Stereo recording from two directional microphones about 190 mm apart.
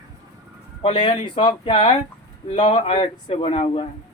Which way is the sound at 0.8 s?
25° left (ahead or behind).